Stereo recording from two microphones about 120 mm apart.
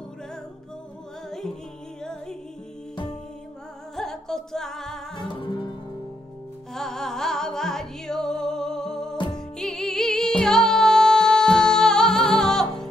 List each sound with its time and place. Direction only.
3.9 s music: 5° left (ahead or behind)
5.3 s music: 45° left (ahead or behind)
6.7 s music: 5° left (ahead or behind)